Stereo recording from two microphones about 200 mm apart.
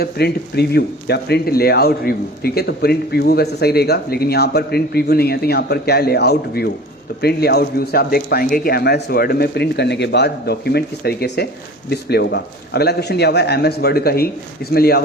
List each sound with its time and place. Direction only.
0.0 s speech: 55° left (ahead or behind)